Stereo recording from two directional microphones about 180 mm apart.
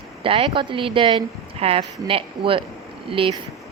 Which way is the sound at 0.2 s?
30° right (ahead or behind).